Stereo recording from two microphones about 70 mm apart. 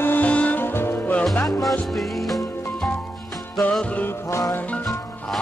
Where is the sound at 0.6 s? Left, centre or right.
Left.